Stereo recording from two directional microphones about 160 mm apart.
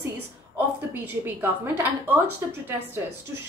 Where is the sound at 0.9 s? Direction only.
10° right (ahead or behind).